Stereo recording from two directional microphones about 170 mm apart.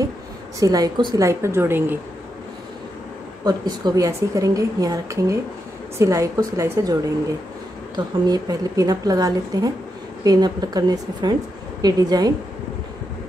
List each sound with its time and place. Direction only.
0.6 s a woman's voice: 20° right (ahead or behind)
3.4 s a woman's voice: 25° right (ahead or behind)